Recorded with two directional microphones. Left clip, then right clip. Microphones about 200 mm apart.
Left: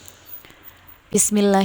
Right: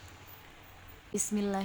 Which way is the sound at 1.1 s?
50° left (ahead or behind).